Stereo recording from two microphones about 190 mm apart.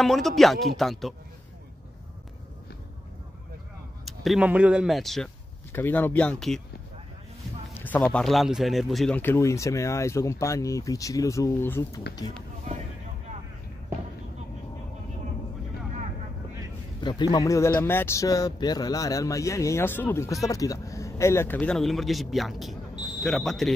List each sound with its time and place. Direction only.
0.0 s speech: centre (ahead or behind)
4.0 s speech: centre (ahead or behind)
7.7 s speech: 10° left (ahead or behind)
17.0 s speech: 20° left (ahead or behind); by 23.7 s centre (ahead or behind)